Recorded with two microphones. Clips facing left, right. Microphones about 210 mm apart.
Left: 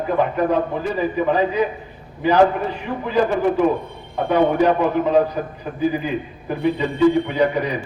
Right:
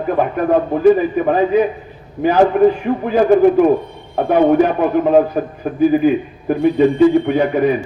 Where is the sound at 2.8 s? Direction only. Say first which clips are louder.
Right 5 dB; 50° right (ahead or behind).